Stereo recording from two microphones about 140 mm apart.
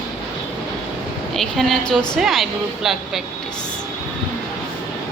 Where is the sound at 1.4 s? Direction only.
Centre (ahead or behind).